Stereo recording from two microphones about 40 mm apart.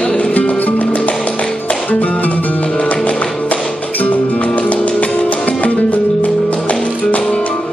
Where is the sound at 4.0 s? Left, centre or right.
Left.